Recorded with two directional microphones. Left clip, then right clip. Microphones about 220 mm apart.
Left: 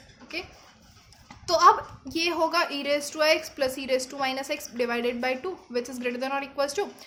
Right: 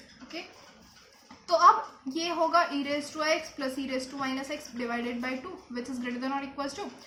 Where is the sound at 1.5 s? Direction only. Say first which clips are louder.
Left 2 dB; 45° left (ahead or behind).